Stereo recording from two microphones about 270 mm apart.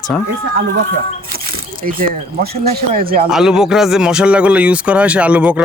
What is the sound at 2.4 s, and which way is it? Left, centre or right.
Speech, right.